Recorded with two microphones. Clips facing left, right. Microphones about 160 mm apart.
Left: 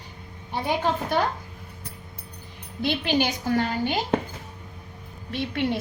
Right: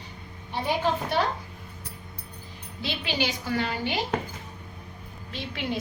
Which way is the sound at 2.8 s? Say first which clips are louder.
Left 6 dB; 50° left (ahead or behind).